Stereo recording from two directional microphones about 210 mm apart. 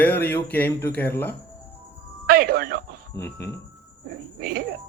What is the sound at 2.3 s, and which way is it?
Speech, 45° right (ahead or behind).